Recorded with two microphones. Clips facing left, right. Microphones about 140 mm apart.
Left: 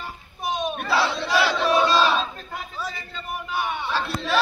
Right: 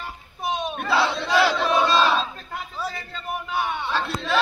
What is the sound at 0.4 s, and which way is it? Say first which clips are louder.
Battle cry: even; 25° right (ahead or behind).